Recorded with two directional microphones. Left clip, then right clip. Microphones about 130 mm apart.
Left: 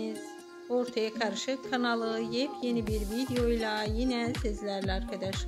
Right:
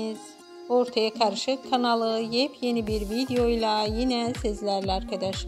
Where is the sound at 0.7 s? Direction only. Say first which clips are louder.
Right 7 dB; 25° right (ahead or behind).